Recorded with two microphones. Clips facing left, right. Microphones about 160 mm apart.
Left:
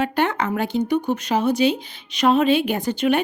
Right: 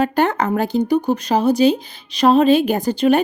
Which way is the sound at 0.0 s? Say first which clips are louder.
Right 4 dB; 40° right (ahead or behind).